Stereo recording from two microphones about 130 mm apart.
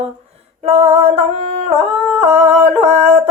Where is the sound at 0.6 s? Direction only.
50° right (ahead or behind).